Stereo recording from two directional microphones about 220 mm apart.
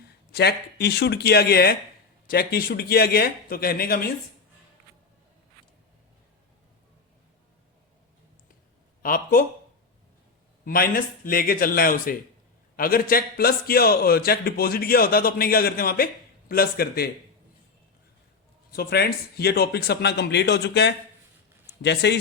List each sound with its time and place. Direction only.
0.0 s a man's voice: 45° left (ahead or behind)
9.0 s speech: 40° left (ahead or behind)
10.7 s a man's voice: 40° left (ahead or behind)
18.7 s a man's voice: 45° left (ahead or behind)